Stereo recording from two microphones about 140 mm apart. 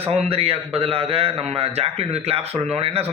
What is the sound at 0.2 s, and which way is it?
A man's voice, 45° right (ahead or behind).